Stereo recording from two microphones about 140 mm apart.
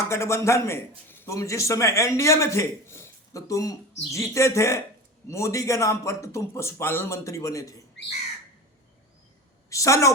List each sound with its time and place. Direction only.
0.1 s a man's voice: 20° left (ahead or behind)
9.6 s a woman's voice: 25° left (ahead or behind)